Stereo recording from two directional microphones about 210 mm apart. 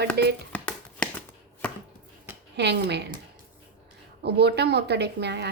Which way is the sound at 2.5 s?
55° right (ahead or behind).